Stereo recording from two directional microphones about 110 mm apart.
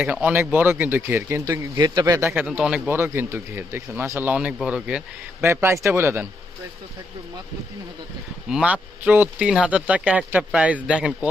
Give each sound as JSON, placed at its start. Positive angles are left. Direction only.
{"t": 0.0, "sound": "speech", "side_deg": -15}
{"t": 1.5, "sound": "speech", "side_deg": -30}
{"t": 2.3, "sound": "speech", "side_deg": -10}
{"t": 2.9, "sound": "speech", "side_deg": -20}
{"t": 4.3, "sound": "speech", "side_deg": -10}
{"t": 5.4, "sound": "speech", "side_deg": -20}
{"t": 8.4, "sound": "speech", "side_deg": -10}